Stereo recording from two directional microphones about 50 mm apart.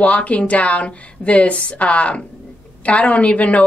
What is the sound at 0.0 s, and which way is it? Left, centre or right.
Speech, left.